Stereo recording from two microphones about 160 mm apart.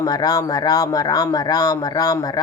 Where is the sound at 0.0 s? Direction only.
25° left (ahead or behind).